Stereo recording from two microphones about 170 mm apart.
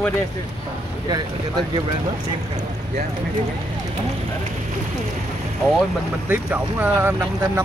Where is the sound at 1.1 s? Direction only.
25° right (ahead or behind).